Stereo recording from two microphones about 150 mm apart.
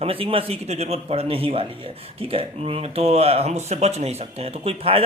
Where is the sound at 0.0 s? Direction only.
40° right (ahead or behind).